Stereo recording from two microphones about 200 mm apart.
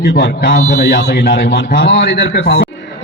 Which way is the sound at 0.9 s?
60° left (ahead or behind).